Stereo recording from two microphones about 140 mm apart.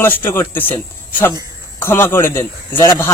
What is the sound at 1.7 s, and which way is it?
A man's voice, 15° left (ahead or behind).